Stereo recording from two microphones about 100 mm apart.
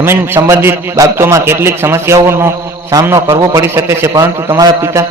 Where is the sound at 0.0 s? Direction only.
25° right (ahead or behind).